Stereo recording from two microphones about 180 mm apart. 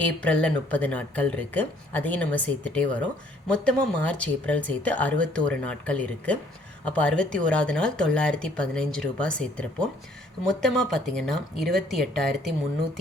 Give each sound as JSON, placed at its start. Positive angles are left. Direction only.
{"t": 0.0, "sound": "speech", "side_deg": 5}